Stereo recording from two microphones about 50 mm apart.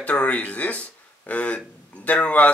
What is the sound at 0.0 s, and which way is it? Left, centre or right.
Speech, left.